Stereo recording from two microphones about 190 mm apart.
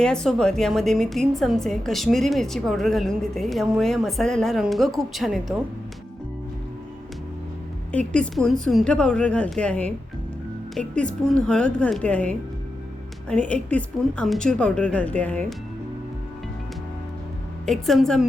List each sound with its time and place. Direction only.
0.0 s a woman's voice: 5° left (ahead or behind)
7.9 s a woman's voice: 5° left (ahead or behind)
17.7 s a woman's voice: centre (ahead or behind)